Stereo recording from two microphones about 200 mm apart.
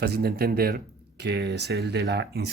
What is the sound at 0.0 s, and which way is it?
Speech, 50° right (ahead or behind).